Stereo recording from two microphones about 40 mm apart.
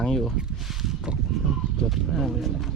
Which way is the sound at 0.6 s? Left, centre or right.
Centre.